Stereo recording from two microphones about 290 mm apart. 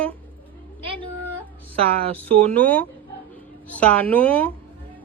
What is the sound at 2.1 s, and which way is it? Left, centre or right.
A woman's voice, centre.